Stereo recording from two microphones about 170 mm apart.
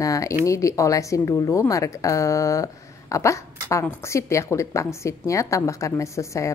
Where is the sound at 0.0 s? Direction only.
20° left (ahead or behind).